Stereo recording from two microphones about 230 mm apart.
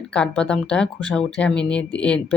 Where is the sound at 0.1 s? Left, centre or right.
Centre.